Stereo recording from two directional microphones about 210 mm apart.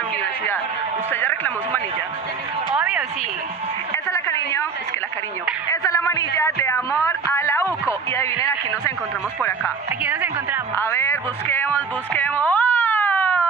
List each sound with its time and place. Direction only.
1.1 s a woman's voice: 10° left (ahead or behind)
2.7 s a woman's voice: 5° right (ahead or behind)
4.1 s a sound: 15° left (ahead or behind)
5.7 s a woman's voice: 15° left (ahead or behind)
7.3 s a sound: 15° left (ahead or behind)
7.8 s a woman's voice: 15° left (ahead or behind)
10.0 s a woman's voice: 10° right (ahead or behind)
10.8 s music: 10° left (ahead or behind)